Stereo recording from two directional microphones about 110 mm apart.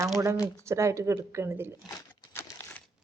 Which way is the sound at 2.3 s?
20° left (ahead or behind).